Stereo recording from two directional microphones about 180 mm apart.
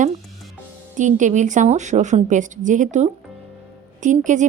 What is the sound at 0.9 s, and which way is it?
A woman's voice, 45° right (ahead or behind).